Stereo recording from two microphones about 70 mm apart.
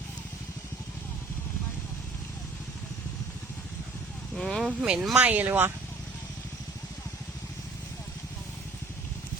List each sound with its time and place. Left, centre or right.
4.4 s speech: centre
4.6 s speech: centre
5.1 s speech: right